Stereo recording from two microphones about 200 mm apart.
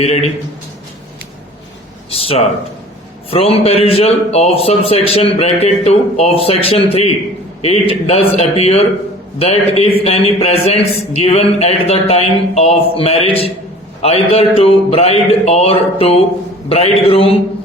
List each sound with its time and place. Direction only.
0.0 s speech: 30° left (ahead or behind)
2.0 s a sound: 30° left (ahead or behind)
3.2 s a man's voice: 30° left (ahead or behind)